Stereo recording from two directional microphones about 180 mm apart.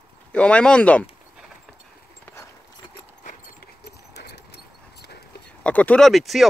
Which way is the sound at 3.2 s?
50° left (ahead or behind).